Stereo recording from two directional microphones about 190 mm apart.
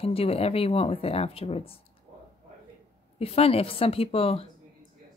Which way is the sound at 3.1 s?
30° left (ahead or behind).